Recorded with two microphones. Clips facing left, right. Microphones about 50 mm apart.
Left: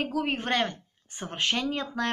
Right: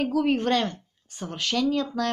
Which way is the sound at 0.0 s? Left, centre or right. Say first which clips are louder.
Right 6 dB; centre.